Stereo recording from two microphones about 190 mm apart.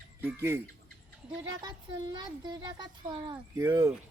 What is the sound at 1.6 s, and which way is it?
Speech, 25° right (ahead or behind).